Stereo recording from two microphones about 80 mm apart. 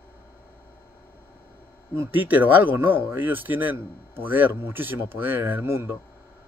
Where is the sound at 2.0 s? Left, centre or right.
Right.